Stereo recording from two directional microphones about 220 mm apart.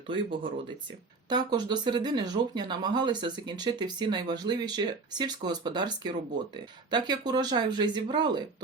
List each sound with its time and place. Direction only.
0.1 s speech: 25° right (ahead or behind)